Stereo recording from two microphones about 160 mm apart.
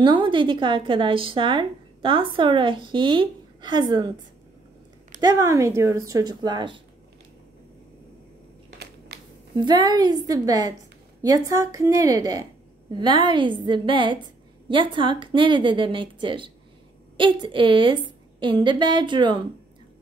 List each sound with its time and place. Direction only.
0.0 s speech: 30° right (ahead or behind)
5.2 s speech: 20° right (ahead or behind)
9.6 s speech: 25° right (ahead or behind)